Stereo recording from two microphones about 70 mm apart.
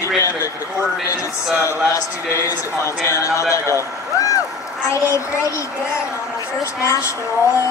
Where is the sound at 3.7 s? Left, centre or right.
Left.